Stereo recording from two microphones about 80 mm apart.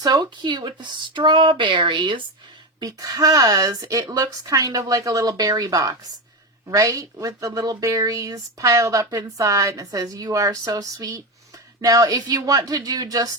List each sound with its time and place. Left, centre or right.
0.0 s speech: right
2.8 s speech: right